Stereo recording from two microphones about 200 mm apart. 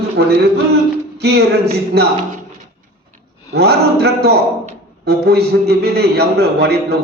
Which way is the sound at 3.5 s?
55° right (ahead or behind).